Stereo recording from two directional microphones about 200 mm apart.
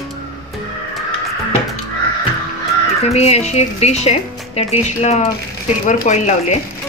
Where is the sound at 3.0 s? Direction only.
30° left (ahead or behind).